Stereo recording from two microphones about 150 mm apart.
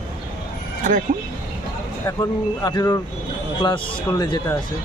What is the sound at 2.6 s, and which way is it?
Speech, 25° left (ahead or behind).